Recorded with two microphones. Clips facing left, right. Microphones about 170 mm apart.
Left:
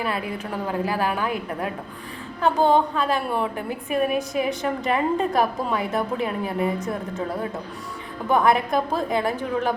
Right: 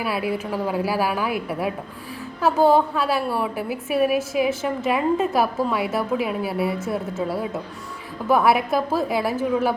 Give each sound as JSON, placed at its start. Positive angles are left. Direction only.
{"t": 0.0, "sound": "a woman's voice", "side_deg": -5}